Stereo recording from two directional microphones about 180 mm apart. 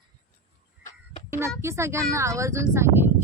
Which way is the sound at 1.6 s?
15° right (ahead or behind).